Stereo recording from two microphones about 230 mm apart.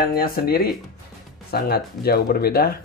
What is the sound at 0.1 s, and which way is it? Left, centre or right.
Speech, left.